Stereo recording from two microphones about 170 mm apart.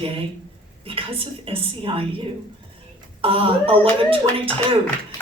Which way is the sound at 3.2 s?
35° right (ahead or behind).